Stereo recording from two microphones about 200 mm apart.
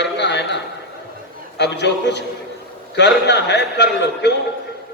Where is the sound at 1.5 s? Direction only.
60° left (ahead or behind).